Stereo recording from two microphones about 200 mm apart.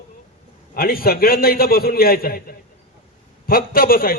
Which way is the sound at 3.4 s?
45° left (ahead or behind).